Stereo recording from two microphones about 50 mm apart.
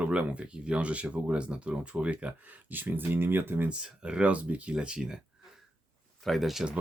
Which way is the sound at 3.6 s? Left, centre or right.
Right.